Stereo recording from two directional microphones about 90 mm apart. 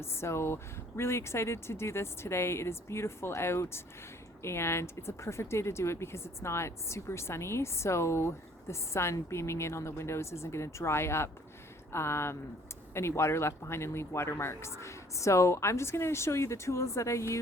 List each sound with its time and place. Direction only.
0.0 s speech: 30° left (ahead or behind)